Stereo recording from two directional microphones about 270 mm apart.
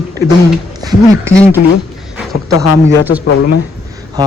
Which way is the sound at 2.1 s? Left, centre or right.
Centre.